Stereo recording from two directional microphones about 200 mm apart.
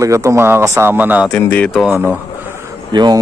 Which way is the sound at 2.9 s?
20° right (ahead or behind).